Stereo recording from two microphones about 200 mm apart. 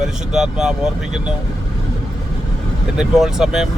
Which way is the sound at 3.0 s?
Centre (ahead or behind).